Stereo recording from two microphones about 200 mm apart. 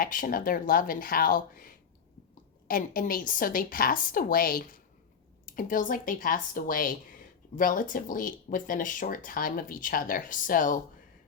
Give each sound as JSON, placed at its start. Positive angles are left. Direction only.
{"t": 0.0, "sound": "speech", "side_deg": 45}